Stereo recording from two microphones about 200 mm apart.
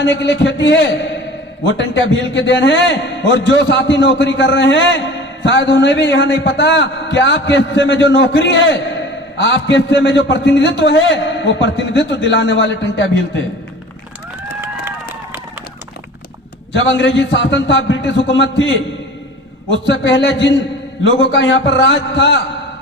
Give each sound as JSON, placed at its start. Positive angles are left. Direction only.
{"t": 0.0, "sound": "a man's voice", "side_deg": 65}
{"t": 16.7, "sound": "a man's voice", "side_deg": 65}
{"t": 19.7, "sound": "a man's voice", "side_deg": 65}